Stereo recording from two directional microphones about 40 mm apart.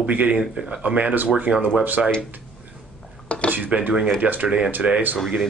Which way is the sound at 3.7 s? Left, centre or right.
Right.